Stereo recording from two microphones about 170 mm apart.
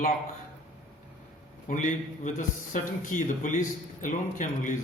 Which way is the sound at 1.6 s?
45° left (ahead or behind).